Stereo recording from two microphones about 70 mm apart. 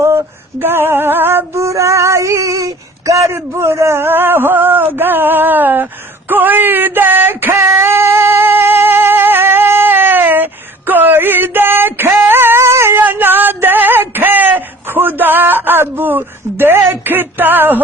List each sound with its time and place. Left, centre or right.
0.0 s female singing: right
1.5 s female singing: right
13.0 s a sound: right